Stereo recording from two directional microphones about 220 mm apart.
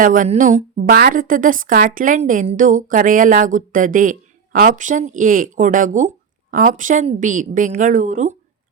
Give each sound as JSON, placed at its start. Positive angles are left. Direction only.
{"t": 0.0, "sound": "speech", "side_deg": -35}